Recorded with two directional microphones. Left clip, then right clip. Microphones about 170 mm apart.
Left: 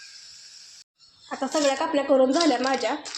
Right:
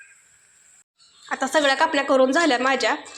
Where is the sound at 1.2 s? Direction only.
5° right (ahead or behind).